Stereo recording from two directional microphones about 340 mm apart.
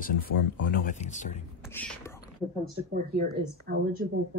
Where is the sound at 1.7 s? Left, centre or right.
Centre.